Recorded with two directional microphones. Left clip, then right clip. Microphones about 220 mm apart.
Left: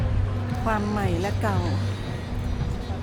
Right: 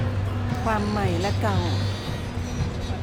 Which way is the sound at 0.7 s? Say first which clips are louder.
Right 1 dB; 5° left (ahead or behind).